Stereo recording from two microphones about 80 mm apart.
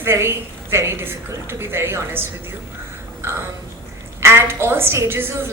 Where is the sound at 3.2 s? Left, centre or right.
Right.